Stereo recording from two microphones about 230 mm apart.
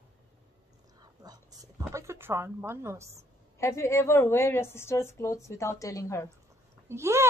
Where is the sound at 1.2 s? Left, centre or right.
Centre.